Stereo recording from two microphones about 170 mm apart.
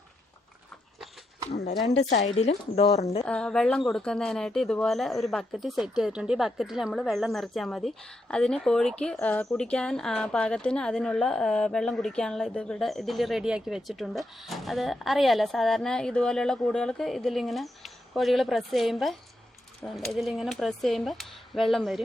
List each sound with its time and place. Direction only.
2.0 s speech: 40° left (ahead or behind)
3.2 s speech: 5° left (ahead or behind)